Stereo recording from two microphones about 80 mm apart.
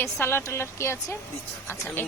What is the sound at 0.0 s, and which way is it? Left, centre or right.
A woman's voice, left.